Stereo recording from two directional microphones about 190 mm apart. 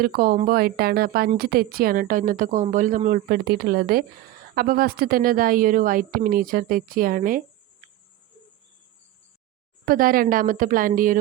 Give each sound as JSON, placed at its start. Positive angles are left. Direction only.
{"t": 0.0, "sound": "a woman's voice", "side_deg": -50}
{"t": 9.8, "sound": "a woman's voice", "side_deg": -50}